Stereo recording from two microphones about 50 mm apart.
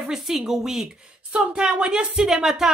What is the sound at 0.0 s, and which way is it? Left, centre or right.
Speech, centre.